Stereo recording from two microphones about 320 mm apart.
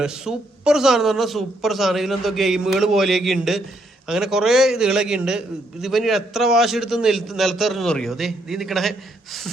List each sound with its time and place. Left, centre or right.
0.0 s a man's voice: centre